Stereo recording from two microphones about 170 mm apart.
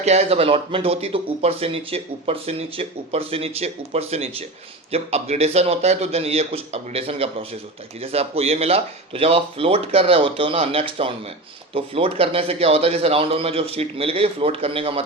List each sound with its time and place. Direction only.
0.0 s speech: 40° right (ahead or behind)